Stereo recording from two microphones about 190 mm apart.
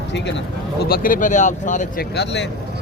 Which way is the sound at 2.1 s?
65° left (ahead or behind).